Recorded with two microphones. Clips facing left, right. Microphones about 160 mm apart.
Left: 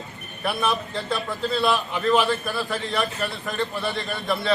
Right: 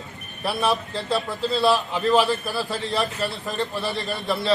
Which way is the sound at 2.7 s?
30° right (ahead or behind).